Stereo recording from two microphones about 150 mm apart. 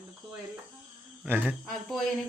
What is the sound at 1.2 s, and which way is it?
Speech, 10° right (ahead or behind).